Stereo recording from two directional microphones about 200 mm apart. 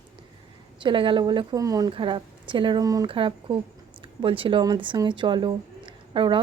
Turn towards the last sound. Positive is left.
turn(degrees=-25)  # may be behind; listen again after turning